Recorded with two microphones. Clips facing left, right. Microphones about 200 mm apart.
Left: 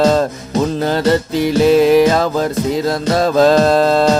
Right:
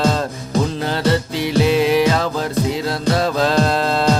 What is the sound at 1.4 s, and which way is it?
Music, 45° left (ahead or behind).